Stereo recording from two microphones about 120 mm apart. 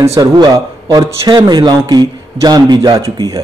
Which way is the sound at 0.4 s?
35° right (ahead or behind).